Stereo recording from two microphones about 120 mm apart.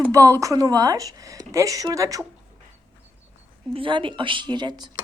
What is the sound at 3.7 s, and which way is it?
Speech, 45° right (ahead or behind).